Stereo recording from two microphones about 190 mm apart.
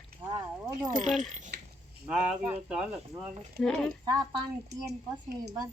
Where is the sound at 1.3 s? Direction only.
40° right (ahead or behind).